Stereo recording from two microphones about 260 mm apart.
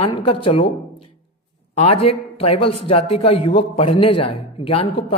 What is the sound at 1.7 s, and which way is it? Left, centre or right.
A man's voice, left.